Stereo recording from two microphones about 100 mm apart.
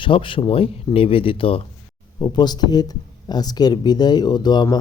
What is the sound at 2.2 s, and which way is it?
Speech, 45° left (ahead or behind).